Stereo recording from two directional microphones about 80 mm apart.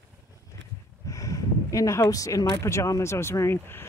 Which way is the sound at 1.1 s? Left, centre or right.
Left.